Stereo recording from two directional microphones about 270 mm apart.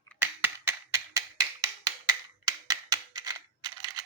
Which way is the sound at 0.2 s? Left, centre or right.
Centre.